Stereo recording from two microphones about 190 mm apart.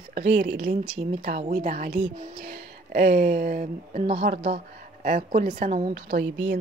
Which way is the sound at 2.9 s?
50° right (ahead or behind).